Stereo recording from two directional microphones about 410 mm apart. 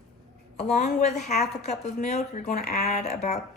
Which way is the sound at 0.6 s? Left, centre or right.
Centre.